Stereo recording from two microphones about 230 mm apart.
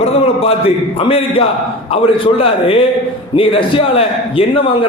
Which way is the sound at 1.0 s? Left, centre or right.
Left.